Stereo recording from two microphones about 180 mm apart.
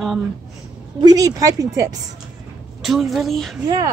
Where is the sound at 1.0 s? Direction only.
20° right (ahead or behind).